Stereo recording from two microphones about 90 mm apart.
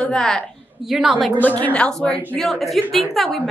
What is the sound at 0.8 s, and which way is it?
Speech, 5° right (ahead or behind).